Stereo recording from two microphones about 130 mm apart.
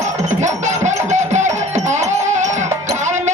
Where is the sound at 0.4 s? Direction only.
65° right (ahead or behind).